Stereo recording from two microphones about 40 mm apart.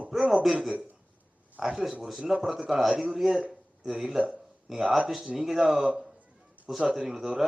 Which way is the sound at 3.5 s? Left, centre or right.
Centre.